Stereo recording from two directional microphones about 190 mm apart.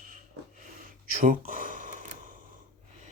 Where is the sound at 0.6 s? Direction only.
45° right (ahead or behind).